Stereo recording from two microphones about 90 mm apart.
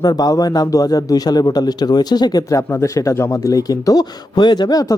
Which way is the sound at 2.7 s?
35° left (ahead or behind).